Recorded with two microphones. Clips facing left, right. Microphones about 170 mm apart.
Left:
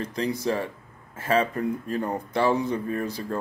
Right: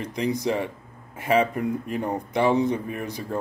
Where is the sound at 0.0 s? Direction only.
15° right (ahead or behind).